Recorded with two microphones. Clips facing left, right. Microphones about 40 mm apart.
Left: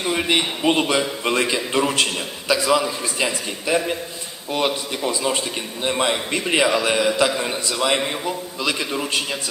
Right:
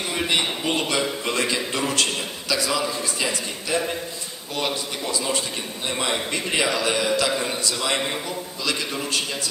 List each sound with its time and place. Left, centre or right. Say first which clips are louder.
0.3 s a man's voice: left 4 dB; left
6.5 s a man's voice: left 4 dB; left